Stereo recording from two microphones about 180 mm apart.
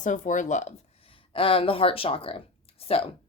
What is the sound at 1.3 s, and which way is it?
Speech, 30° left (ahead or behind).